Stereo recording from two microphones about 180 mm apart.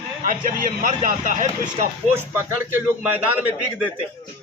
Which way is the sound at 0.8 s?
45° right (ahead or behind).